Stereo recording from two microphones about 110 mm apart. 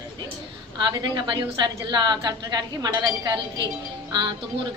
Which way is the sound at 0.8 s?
45° right (ahead or behind).